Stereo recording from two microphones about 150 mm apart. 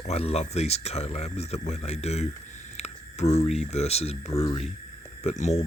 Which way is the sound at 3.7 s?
45° left (ahead or behind).